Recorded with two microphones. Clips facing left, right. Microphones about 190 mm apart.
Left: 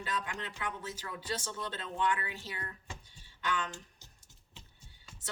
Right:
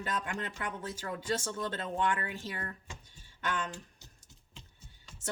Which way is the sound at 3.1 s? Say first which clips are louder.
Even; 45° right (ahead or behind).